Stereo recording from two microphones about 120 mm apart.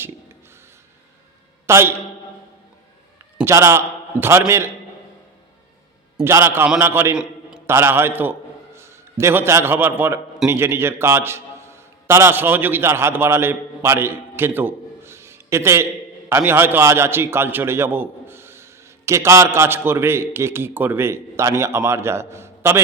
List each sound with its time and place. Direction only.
1.6 s a man's voice: 20° right (ahead or behind)
3.4 s a man's voice: 20° right (ahead or behind)
6.2 s a man's voice: 20° right (ahead or behind)